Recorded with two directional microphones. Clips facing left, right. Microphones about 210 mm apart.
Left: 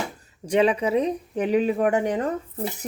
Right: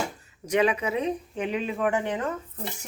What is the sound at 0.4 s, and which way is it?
Speech, 30° left (ahead or behind).